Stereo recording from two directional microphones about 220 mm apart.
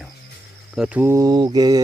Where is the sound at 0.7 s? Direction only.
5° right (ahead or behind).